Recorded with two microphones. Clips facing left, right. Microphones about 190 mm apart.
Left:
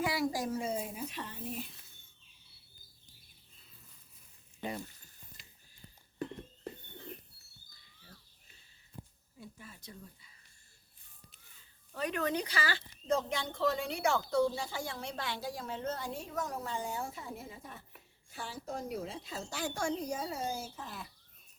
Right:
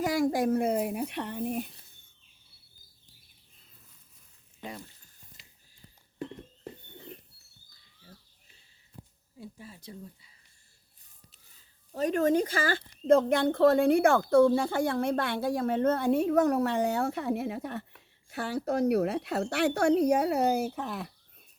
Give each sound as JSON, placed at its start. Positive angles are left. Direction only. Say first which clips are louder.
{"t": 0.0, "sound": "a child's voice", "louder": "right 7 dB", "side_deg": -50}
{"t": 4.6, "sound": "speech", "louder": "left 2 dB", "side_deg": 0}
{"t": 8.0, "sound": "a sound", "louder": "right 4 dB", "side_deg": -25}
{"t": 11.9, "sound": "speech", "louder": "right 9 dB", "side_deg": -40}